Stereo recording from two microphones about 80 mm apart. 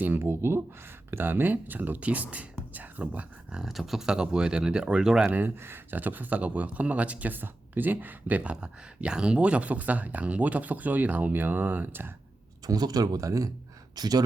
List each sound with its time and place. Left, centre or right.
0.0 s speech: right
3.6 s speech: centre
5.3 s speech: right
12.6 s speech: right